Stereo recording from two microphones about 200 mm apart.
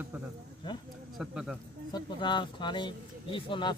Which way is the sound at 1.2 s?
Centre (ahead or behind).